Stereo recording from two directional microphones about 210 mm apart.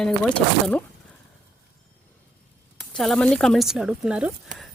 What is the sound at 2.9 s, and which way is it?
Speech, centre (ahead or behind).